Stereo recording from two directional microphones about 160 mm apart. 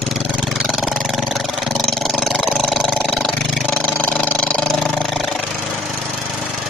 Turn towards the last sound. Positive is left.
turn(degrees=0)  # may be behind; listen again after turning